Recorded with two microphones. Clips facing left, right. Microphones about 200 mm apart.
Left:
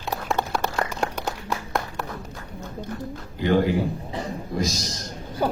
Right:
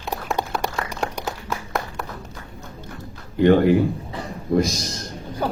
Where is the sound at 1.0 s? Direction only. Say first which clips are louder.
Even; centre (ahead or behind).